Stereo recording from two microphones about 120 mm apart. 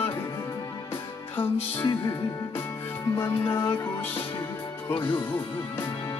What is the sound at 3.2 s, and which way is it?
Music, 20° left (ahead or behind).